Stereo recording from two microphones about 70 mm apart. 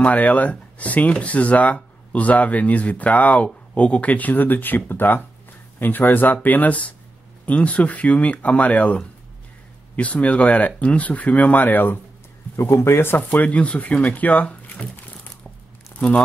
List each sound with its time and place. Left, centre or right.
0.0 s speech: left